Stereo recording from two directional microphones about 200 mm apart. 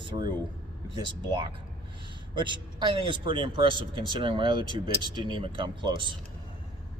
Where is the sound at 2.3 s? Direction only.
25° right (ahead or behind).